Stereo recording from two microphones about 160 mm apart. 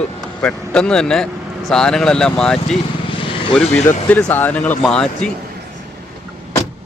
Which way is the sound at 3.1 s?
35° left (ahead or behind).